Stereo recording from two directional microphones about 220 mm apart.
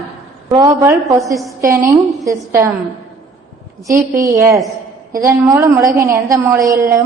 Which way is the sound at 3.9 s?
10° right (ahead or behind).